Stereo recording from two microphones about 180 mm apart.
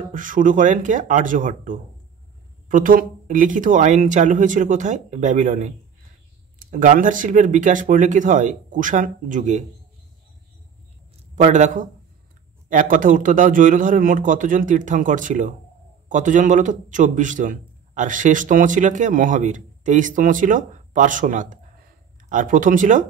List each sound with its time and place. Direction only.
0.1 s a man's voice: 45° right (ahead or behind)
11.3 s a man's voice: 40° right (ahead or behind)